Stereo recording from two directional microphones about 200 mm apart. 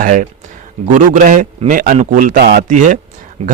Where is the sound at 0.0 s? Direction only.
40° right (ahead or behind).